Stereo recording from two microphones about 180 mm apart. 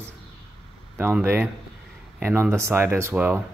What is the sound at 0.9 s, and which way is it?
Speech, 10° right (ahead or behind).